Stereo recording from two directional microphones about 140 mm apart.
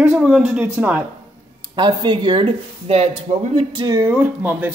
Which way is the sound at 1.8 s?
35° right (ahead or behind).